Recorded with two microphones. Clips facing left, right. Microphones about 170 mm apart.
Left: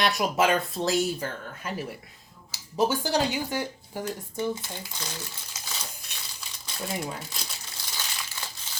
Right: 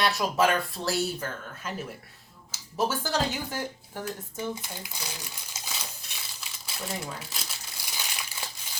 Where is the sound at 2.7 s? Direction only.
15° left (ahead or behind).